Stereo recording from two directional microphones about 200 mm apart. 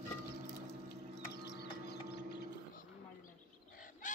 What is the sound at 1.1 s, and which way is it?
Mechanisms, 55° left (ahead or behind).